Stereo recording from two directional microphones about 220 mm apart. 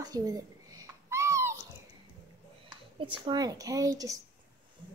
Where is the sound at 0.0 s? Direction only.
15° right (ahead or behind).